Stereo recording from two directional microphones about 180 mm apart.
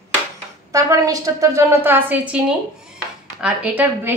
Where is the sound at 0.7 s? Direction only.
20° right (ahead or behind).